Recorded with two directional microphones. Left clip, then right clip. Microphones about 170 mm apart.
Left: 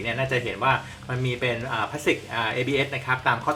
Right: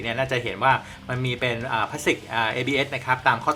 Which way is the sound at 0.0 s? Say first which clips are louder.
Right 1 dB; 30° right (ahead or behind).